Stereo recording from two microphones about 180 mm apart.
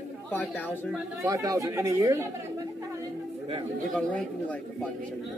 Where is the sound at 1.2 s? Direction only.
20° right (ahead or behind).